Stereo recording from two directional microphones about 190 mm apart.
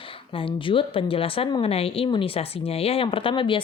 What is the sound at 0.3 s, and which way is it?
Speech, 25° left (ahead or behind).